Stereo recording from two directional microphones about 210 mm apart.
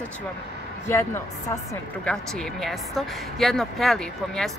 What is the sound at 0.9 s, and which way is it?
Speech, 10° left (ahead or behind).